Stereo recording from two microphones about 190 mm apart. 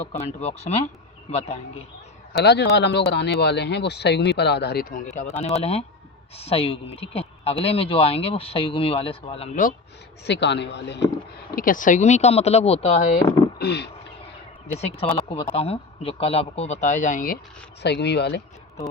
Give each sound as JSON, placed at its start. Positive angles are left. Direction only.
{"t": 0.1, "sound": "speech", "side_deg": 35}
{"t": 2.3, "sound": "speech", "side_deg": 60}
{"t": 5.1, "sound": "speech", "side_deg": 35}
{"t": 10.2, "sound": "speech", "side_deg": 65}
{"t": 11.5, "sound": "speech", "side_deg": 45}
{"t": 13.6, "sound": "speech", "side_deg": 60}
{"t": 14.7, "sound": "speech", "side_deg": 35}
{"t": 17.8, "sound": "speech", "side_deg": 65}